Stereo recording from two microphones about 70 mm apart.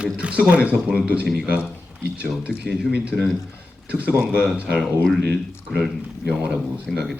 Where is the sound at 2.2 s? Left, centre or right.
Centre.